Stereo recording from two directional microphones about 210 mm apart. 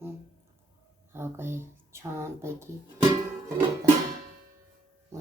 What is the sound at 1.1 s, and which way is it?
Speech, 10° right (ahead or behind).